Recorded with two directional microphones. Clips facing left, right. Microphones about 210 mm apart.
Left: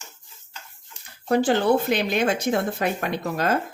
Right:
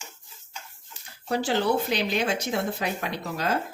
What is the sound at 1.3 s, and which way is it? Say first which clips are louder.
Speech: left 5 dB; 55° left (ahead or behind).